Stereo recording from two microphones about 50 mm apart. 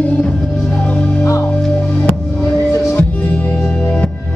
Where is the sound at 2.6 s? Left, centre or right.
Left.